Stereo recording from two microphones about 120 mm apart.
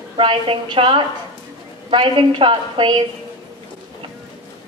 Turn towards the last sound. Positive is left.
turn(degrees=-45)  # may be behind; listen again after turning